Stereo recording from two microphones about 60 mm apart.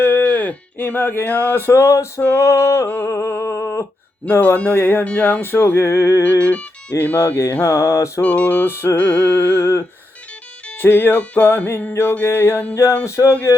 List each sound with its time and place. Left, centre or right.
0.0 s a sound: left
2.3 s mantra: left
4.3 s music: left
5.0 s music: left
5.4 s music: left
6.4 s music: left
7.0 s music: left
7.6 s mantra: left
8.2 s music: left
8.6 s music: left
9.0 s music: left
10.8 s speech: left
11.2 s music: left
12.7 s mantra: left